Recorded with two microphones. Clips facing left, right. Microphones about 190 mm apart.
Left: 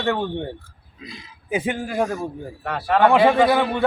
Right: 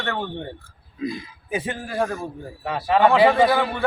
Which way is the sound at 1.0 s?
50° right (ahead or behind).